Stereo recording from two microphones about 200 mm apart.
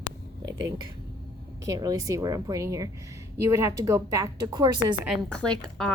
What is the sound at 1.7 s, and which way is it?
Speech, 15° right (ahead or behind).